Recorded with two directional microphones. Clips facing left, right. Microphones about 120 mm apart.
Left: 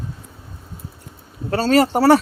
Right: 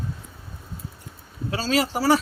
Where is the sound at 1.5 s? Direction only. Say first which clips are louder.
Left 8 dB; 55° left (ahead or behind).